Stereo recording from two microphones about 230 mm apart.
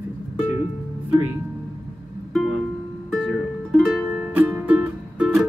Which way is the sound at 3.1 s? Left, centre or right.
Centre.